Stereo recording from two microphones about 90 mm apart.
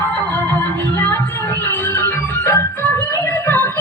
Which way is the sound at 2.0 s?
25° left (ahead or behind).